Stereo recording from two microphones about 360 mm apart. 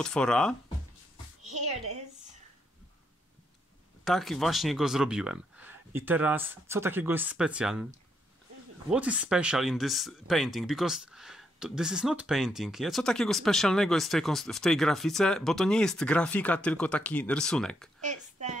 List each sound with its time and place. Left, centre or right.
0.0 s speech: centre
4.0 s speech: centre
8.9 s speech: centre
18.0 s a woman's voice: centre